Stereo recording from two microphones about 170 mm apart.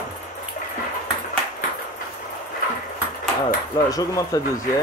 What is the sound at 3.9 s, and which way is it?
Speech, 20° left (ahead or behind).